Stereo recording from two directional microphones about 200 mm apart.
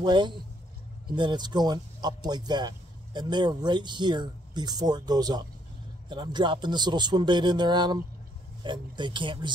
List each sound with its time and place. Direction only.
0.0 s speech: 25° right (ahead or behind)